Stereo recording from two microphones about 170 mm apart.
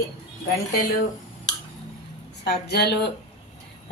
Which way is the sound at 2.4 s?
75° left (ahead or behind).